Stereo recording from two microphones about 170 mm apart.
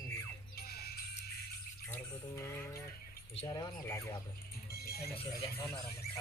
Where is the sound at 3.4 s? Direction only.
20° left (ahead or behind).